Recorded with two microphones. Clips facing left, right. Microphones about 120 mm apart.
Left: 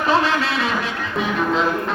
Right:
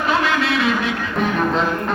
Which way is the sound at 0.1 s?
30° left (ahead or behind).